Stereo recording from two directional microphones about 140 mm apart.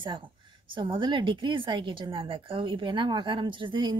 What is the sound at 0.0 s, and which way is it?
A woman's voice, 35° right (ahead or behind).